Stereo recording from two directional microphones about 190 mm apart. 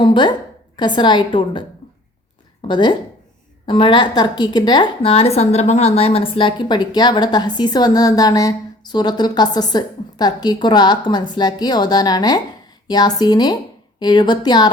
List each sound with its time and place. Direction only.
0.0 s a woman's voice: 25° left (ahead or behind)